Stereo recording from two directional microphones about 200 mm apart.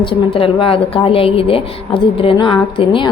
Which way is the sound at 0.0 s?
25° left (ahead or behind).